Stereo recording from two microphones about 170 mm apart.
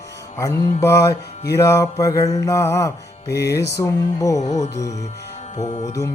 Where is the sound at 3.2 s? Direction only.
80° left.